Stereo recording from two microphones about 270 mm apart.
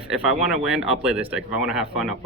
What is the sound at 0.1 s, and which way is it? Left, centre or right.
Speech, centre.